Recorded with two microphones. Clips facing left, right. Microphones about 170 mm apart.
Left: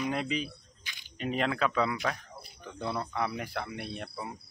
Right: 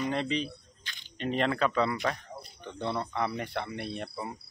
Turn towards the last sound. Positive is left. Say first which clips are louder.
# right 2 dB
turn(degrees=0)  # may be behind; listen again after turning